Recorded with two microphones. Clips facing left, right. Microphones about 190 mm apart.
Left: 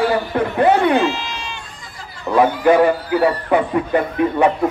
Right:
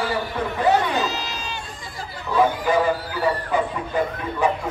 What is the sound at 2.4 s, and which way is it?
Speech, 65° left (ahead or behind).